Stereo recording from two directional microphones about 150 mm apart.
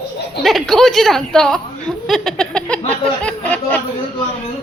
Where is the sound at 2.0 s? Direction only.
5° left (ahead or behind).